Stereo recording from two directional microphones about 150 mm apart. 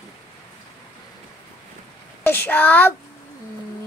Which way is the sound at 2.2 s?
15° left (ahead or behind).